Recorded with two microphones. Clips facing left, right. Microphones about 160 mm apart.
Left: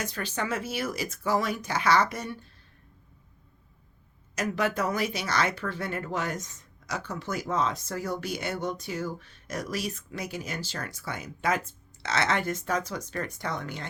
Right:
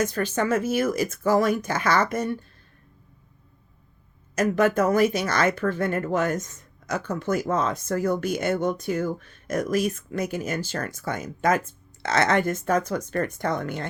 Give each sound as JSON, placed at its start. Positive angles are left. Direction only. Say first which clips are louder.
{"t": 0.0, "sound": "speech", "louder": "right 8 dB", "side_deg": -45}
{"t": 4.4, "sound": "speech", "louder": "right 7 dB", "side_deg": -50}